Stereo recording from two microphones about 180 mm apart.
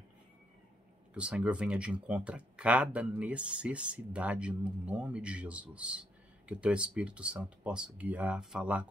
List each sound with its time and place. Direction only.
1.1 s speech: 5° right (ahead or behind)